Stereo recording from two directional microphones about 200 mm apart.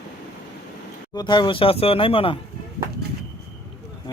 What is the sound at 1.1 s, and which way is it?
Speech, 20° left (ahead or behind).